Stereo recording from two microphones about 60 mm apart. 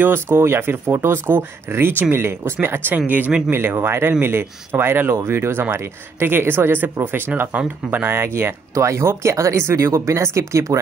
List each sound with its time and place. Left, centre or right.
0.0 s speech: right
3.4 s speech: right
8.7 s speech: right